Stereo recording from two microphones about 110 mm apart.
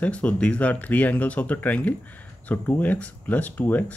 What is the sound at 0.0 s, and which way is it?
Speech, 10° left (ahead or behind).